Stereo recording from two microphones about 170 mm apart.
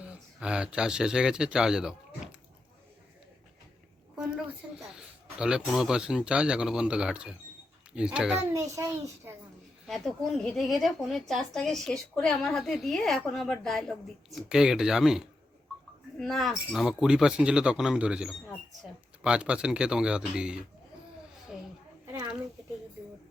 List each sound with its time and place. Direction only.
0.0 s speech: 5° right (ahead or behind)
4.1 s a sound: 5° right (ahead or behind)
4.6 s a child's voice: 5° right (ahead or behind)
4.9 s a sound: 5° right (ahead or behind)
5.7 s speech: 5° right (ahead or behind)
8.4 s a child's voice: 15° right (ahead or behind)
9.8 s speech: centre (ahead or behind)